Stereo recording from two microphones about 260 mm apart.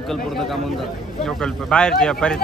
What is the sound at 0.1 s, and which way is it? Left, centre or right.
A man's voice, centre.